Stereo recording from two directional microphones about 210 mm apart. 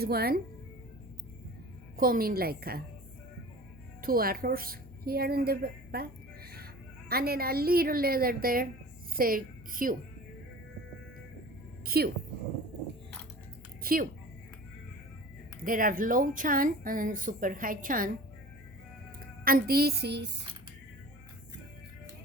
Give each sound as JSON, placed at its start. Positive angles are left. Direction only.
{"t": 0.0, "sound": "a woman's voice", "side_deg": -45}
{"t": 2.0, "sound": "a woman's voice", "side_deg": -45}
{"t": 4.0, "sound": "a woman's voice", "side_deg": -45}
{"t": 11.9, "sound": "a woman's voice", "side_deg": -45}
{"t": 13.8, "sound": "a woman's voice", "side_deg": -45}
{"t": 15.6, "sound": "a woman's voice", "side_deg": -40}
{"t": 19.2, "sound": "a woman's voice", "side_deg": -45}